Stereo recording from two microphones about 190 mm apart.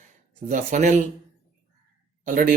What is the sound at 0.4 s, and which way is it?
Speech, 40° right (ahead or behind).